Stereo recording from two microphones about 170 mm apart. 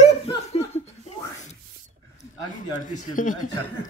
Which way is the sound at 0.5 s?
40° left (ahead or behind).